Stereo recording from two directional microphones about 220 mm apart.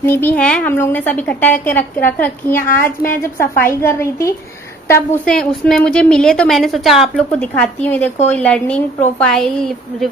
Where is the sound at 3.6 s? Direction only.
10° left (ahead or behind).